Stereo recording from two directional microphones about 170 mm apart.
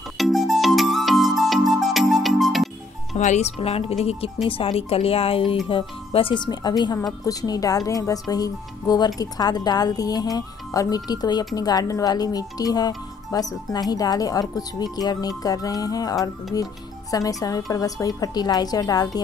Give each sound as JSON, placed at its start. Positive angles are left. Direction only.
{"t": 0.2, "sound": "music", "side_deg": 0}
{"t": 3.2, "sound": "speech", "side_deg": 40}